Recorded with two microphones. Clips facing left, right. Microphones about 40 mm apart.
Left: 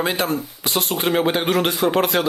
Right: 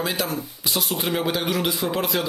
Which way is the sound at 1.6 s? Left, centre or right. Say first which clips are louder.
Left 6 dB; left.